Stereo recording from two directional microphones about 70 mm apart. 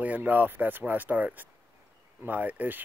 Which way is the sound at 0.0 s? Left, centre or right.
Right.